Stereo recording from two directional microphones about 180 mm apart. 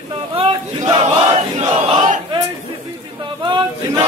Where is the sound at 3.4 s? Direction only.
25° right (ahead or behind).